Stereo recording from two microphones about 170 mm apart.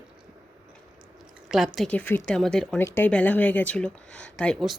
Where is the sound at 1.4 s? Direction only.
Centre (ahead or behind).